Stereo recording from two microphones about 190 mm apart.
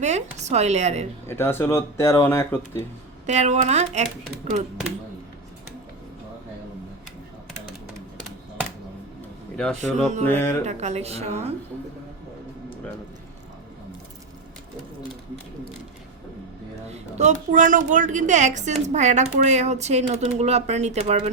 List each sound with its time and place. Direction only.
0.0 s a woman's voice: 35° right (ahead or behind)
1.3 s speech: 10° left (ahead or behind)
3.2 s a woman's voice: 35° right (ahead or behind)
9.9 s mantra: 5° left (ahead or behind)
10.2 s speech: 10° left (ahead or behind)
10.7 s a woman's voice: 35° right (ahead or behind)
16.9 s a woman's voice: 40° right (ahead or behind)